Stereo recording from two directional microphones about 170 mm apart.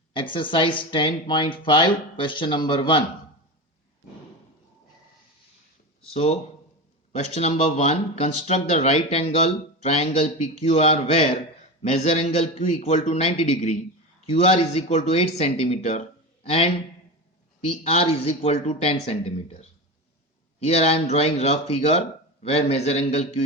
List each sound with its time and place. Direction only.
0.1 s speech: 30° left (ahead or behind)
6.1 s speech: 35° left (ahead or behind)
17.8 s speech: 35° left (ahead or behind)